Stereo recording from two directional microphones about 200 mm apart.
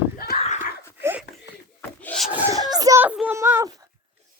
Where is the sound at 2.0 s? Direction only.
5° left (ahead or behind).